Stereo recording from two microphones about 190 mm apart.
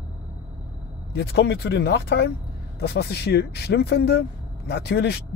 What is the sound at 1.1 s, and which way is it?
Speech, 65° left (ahead or behind).